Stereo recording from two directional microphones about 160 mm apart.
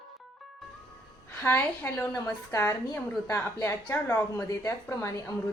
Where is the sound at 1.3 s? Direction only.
15° left (ahead or behind).